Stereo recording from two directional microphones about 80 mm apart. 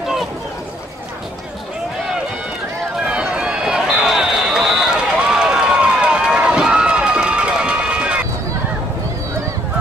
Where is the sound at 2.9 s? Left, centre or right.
Centre.